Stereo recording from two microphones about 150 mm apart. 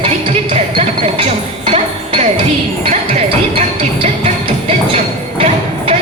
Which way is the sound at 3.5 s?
40° right (ahead or behind).